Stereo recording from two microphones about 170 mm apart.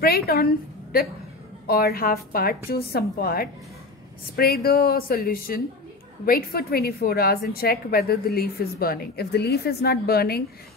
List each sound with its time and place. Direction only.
0.0 s a woman's voice: 65° left (ahead or behind)
1.7 s a woman's voice: 65° left (ahead or behind)